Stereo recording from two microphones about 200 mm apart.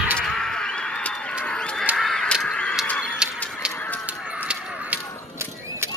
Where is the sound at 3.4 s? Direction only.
Centre (ahead or behind).